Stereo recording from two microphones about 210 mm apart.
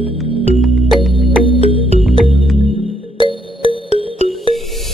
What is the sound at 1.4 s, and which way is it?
Music, 25° left (ahead or behind).